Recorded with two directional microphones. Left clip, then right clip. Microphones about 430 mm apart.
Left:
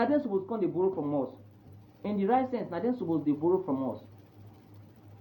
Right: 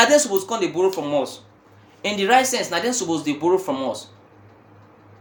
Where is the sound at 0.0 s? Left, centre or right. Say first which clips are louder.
Right 12 dB; right.